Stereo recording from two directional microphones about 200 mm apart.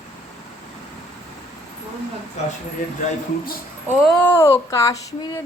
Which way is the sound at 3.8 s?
Centre (ahead or behind).